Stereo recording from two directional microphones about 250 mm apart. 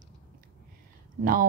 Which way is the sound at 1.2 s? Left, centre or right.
Right.